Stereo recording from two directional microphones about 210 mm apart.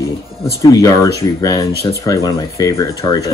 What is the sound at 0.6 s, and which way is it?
Speech, 15° left (ahead or behind).